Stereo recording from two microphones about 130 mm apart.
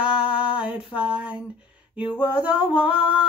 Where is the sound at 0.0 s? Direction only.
10° right (ahead or behind).